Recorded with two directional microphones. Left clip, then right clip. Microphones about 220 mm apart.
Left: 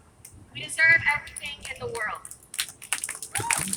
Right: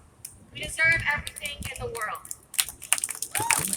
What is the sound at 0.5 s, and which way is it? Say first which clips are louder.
Speech: left 3 dB; 15° left (ahead or behind).